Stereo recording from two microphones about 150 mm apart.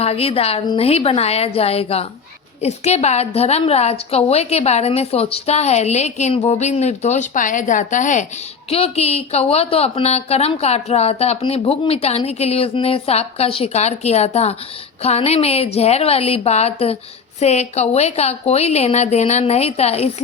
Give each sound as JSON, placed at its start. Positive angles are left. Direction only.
{"t": 0.0, "sound": "a woman's voice", "side_deg": 40}
{"t": 8.7, "sound": "a woman's voice", "side_deg": 40}